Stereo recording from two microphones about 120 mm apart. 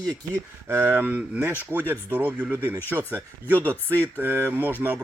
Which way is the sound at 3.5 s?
15° left (ahead or behind).